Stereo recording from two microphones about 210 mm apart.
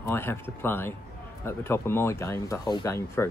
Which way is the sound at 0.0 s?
10° left (ahead or behind).